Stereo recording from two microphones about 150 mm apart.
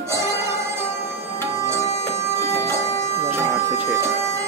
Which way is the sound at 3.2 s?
15° right (ahead or behind).